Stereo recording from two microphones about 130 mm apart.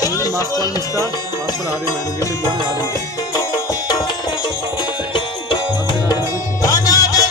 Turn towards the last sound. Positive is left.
turn(degrees=30)  # may be behind; listen again after turning